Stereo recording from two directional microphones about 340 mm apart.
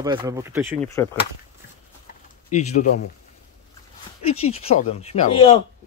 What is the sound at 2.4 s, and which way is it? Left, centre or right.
Speech, left.